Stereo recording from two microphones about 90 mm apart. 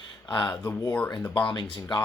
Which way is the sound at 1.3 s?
55° left (ahead or behind).